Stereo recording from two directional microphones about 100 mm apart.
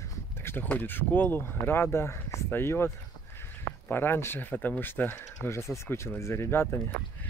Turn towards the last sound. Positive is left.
turn(degrees=25)  # may be behind; listen again after turning